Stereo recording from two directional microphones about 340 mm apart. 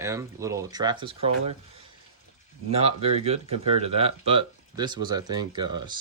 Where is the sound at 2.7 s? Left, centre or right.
Centre.